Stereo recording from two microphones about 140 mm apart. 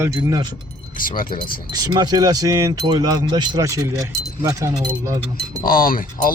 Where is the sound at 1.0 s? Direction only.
85° left.